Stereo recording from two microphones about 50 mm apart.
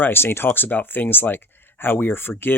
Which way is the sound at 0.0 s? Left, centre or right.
Left.